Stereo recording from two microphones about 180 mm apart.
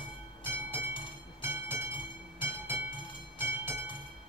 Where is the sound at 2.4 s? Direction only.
10° right (ahead or behind).